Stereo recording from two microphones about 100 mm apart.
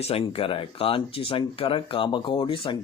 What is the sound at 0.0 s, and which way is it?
Speech, 75° left (ahead or behind).